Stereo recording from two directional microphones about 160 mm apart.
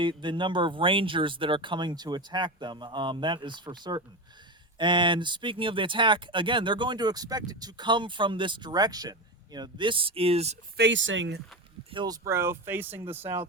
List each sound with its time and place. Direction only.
0.0 s speech: 30° right (ahead or behind)
10.8 s speech: 90° right
11.9 s speech: 25° right (ahead or behind)